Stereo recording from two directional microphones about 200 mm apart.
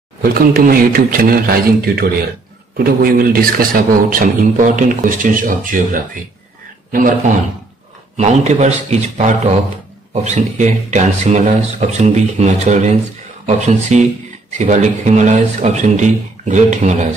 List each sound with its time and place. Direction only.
0.2 s a man's voice: 50° right (ahead or behind)
8.2 s speech: 35° right (ahead or behind)